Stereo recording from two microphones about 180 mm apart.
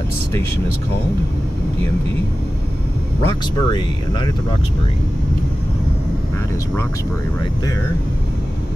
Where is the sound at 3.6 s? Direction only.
25° left (ahead or behind).